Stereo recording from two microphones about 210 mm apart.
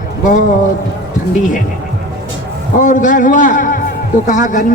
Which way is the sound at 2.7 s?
35° left (ahead or behind).